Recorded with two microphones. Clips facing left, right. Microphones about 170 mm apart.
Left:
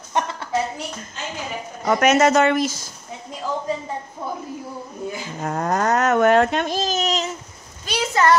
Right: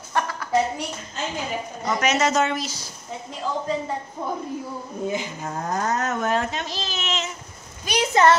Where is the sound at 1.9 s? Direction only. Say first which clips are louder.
Left 6 dB; 55° left (ahead or behind).